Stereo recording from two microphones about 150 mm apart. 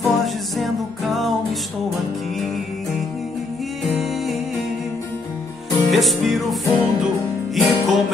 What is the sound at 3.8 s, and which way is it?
Music, centre (ahead or behind).